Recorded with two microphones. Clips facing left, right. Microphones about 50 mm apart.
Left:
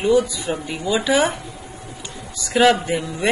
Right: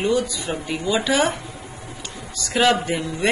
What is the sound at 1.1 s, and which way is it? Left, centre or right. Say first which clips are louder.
Speech: left 2 dB; centre.